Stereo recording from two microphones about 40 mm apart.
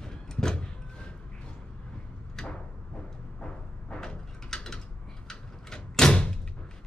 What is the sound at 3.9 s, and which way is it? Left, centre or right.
Mechanisms, centre.